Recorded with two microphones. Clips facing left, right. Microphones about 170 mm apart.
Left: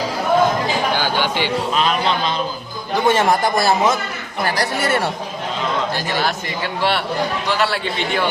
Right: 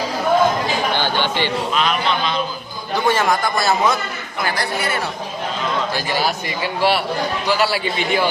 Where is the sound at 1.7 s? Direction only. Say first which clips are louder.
Left 2 dB; 35° left (ahead or behind).